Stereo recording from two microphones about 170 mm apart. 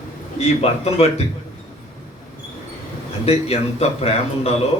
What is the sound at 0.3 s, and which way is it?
Speech, 35° left (ahead or behind).